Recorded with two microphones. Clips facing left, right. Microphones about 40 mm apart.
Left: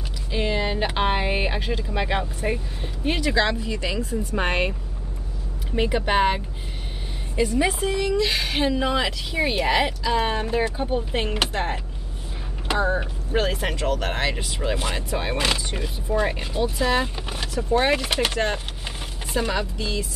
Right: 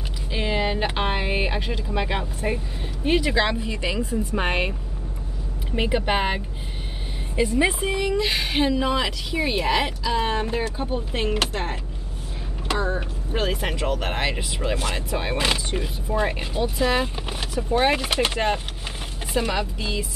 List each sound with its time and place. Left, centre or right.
0.3 s a sound: centre
0.9 s speech: centre
3.2 s a woman's voice: centre
4.4 s speech: centre
5.8 s speech: centre
7.3 s speech: centre
12.6 s a sound: centre
13.3 s speech: centre